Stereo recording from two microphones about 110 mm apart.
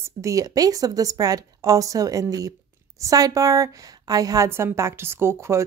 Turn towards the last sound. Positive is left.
turn(degrees=-25)  # may be behind; listen again after turning